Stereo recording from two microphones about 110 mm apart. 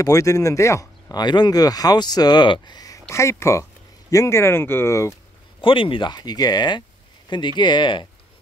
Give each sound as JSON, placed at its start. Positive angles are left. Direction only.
{"t": 0.0, "sound": "speech", "side_deg": 30}
{"t": 5.6, "sound": "speech", "side_deg": 50}